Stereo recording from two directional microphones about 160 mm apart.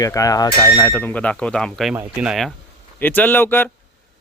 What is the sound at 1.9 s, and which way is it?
Speech, 5° right (ahead or behind).